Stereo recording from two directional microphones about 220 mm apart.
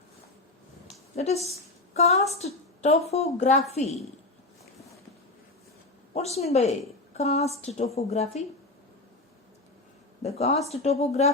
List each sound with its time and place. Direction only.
0.9 s a sound: 30° left (ahead or behind)
1.5 s a woman's voice: 30° left (ahead or behind)
6.1 s a woman's voice: 30° left (ahead or behind)
10.2 s a woman's voice: 30° left (ahead or behind)